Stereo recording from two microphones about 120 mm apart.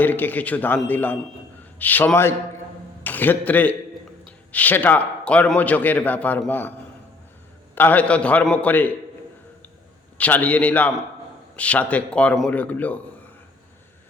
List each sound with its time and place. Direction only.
0.0 s a man's voice: 15° left (ahead or behind)
7.8 s a man's voice: 15° left (ahead or behind)
10.2 s a man's voice: 10° left (ahead or behind)